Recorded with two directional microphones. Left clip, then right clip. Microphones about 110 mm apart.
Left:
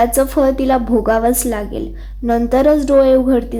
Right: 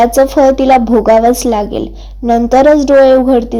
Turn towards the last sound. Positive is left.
turn(degrees=-25)  # may be behind; listen again after turning